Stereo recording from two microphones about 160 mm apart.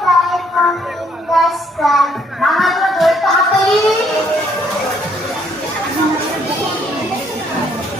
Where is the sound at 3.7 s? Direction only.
Centre (ahead or behind).